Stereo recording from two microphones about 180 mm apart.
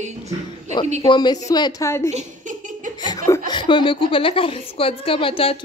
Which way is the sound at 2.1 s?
45° right (ahead or behind).